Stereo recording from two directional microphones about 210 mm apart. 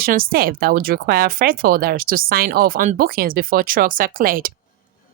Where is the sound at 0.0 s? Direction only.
45° right (ahead or behind).